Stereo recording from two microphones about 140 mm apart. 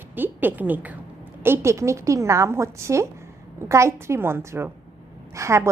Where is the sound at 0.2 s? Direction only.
15° right (ahead or behind).